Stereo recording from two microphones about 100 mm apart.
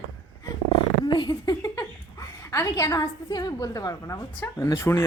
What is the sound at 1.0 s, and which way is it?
Speech, 45° left (ahead or behind).